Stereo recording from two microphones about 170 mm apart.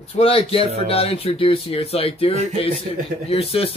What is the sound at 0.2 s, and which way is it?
Speech, 35° left (ahead or behind).